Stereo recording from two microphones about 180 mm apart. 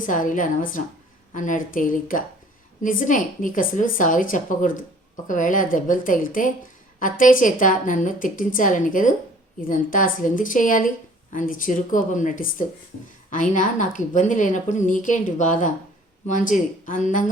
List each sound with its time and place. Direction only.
0.0 s speech: 45° left (ahead or behind)